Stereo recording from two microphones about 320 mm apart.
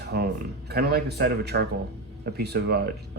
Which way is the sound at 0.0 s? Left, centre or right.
Right.